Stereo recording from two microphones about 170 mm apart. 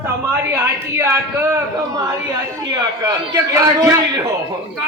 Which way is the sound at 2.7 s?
20° right (ahead or behind).